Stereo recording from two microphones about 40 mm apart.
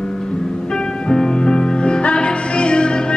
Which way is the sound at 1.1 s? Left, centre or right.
Centre.